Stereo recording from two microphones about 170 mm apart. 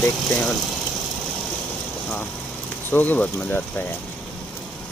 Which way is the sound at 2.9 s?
10° left (ahead or behind).